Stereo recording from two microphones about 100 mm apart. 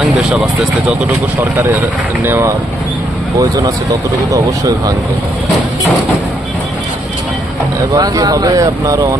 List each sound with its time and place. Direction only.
0.0 s speech: 5° right (ahead or behind)
2.2 s speech: 25° right (ahead or behind)
3.3 s speech: 35° right (ahead or behind)
7.9 s speech: 40° right (ahead or behind)